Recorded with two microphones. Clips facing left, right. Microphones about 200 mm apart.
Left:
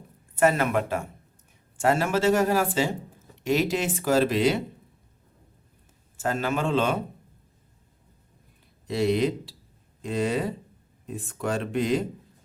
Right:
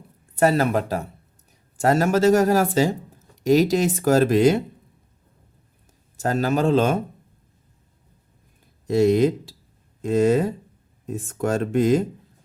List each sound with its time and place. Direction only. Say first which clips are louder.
0.3 s speech: right 3 dB; 35° right (ahead or behind)
6.1 s speech: right 5 dB; 40° right (ahead or behind)
8.9 s speech: right 6 dB; 45° right (ahead or behind)